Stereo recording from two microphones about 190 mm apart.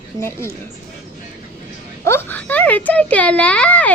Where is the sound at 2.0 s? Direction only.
10° left (ahead or behind).